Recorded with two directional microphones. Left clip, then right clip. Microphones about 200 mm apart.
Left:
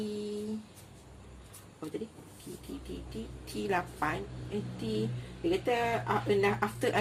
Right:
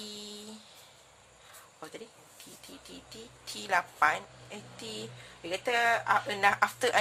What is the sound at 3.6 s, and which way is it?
Speech, 35° right (ahead or behind).